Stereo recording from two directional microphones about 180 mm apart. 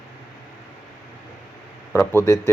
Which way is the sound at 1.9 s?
15° left (ahead or behind).